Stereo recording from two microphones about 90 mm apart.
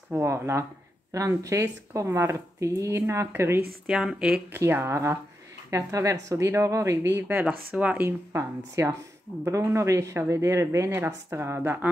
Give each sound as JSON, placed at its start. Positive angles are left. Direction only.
{"t": 0.2, "sound": "a woman's voice", "side_deg": -30}
{"t": 3.8, "sound": "a woman's voice", "side_deg": -5}
{"t": 4.5, "sound": "a woman's voice", "side_deg": -25}
{"t": 7.4, "sound": "a woman's voice", "side_deg": -15}
{"t": 8.0, "sound": "a woman's voice", "side_deg": -30}